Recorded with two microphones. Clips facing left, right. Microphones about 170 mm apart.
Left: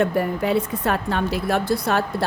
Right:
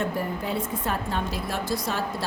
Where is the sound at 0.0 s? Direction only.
70° left (ahead or behind).